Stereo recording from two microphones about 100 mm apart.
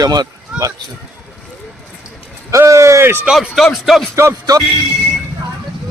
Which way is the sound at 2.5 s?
30° right (ahead or behind).